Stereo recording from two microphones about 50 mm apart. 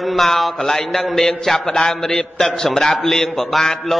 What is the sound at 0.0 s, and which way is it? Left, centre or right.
A man's voice, centre.